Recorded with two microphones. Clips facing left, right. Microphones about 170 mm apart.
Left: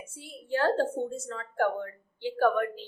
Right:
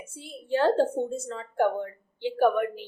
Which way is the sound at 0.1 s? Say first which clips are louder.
Right 4 dB; 20° right (ahead or behind).